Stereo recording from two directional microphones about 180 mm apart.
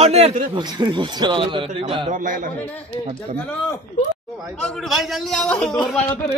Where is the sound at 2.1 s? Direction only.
45° right (ahead or behind).